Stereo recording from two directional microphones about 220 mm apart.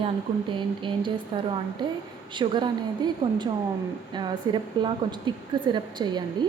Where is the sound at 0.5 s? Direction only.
20° right (ahead or behind).